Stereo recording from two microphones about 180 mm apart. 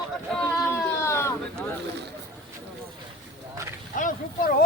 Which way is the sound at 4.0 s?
50° left (ahead or behind).